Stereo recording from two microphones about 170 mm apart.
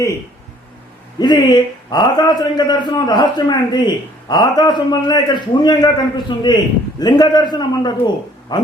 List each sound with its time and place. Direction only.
1.2 s a man's voice: 25° left (ahead or behind)